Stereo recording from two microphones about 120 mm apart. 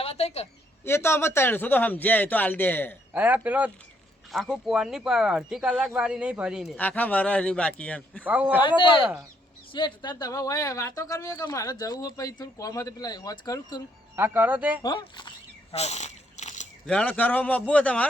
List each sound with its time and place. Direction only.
0.0 s a woman's voice: 60° left (ahead or behind)
0.9 s a man's voice: 20° left (ahead or behind)
3.1 s speech: 15° right (ahead or behind)
4.3 s speech: centre (ahead or behind)
6.7 s a man's voice: 15° left (ahead or behind)
8.2 s speech: 10° right (ahead or behind)
8.6 s speech: 45° left (ahead or behind)
14.2 s speech: 15° right (ahead or behind)
14.8 s speech: 35° left (ahead or behind)
15.7 s a sound: 65° left (ahead or behind)
16.8 s a man's voice: 10° left (ahead or behind)